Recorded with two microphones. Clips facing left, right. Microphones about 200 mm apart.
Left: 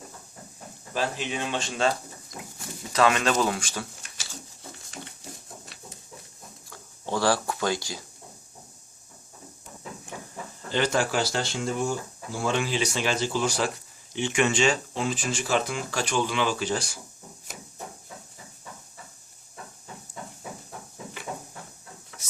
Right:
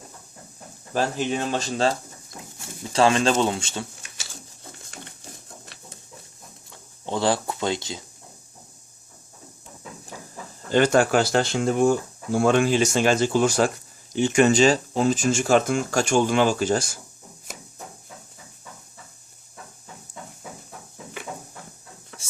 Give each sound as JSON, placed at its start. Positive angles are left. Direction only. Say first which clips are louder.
{"t": 0.9, "sound": "speech", "louder": "right 5 dB", "side_deg": -45}
{"t": 2.9, "sound": "speech", "louder": "right 3 dB", "side_deg": -30}
{"t": 6.7, "sound": "speech", "louder": "right 1 dB", "side_deg": -20}
{"t": 10.7, "sound": "speech", "louder": "right 7 dB", "side_deg": -50}
{"t": 20.1, "sound": "a sound", "louder": "left 1 dB", "side_deg": -50}